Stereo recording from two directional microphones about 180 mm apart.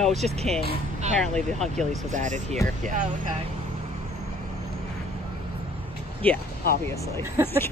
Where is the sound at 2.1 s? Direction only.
45° right (ahead or behind).